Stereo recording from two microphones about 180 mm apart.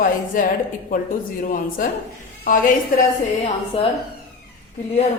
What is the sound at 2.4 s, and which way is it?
Speech, 50° left (ahead or behind).